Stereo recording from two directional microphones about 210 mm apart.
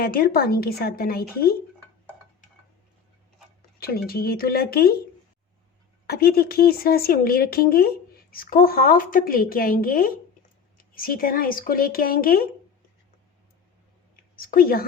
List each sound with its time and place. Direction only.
0.0 s speech: 45° left (ahead or behind)
3.8 s speech: 45° left (ahead or behind)
6.1 s speech: 45° left (ahead or behind)
14.3 s speech: 45° left (ahead or behind)